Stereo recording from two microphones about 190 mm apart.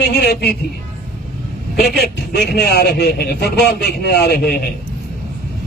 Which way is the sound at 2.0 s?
60° left (ahead or behind).